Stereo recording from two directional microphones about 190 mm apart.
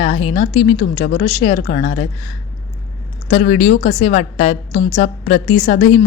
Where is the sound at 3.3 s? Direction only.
35° left (ahead or behind).